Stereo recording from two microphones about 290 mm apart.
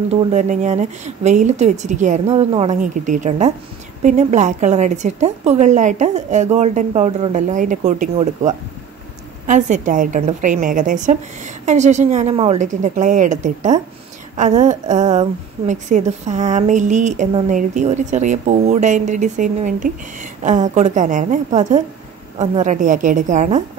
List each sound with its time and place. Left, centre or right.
0.1 s a woman's voice: right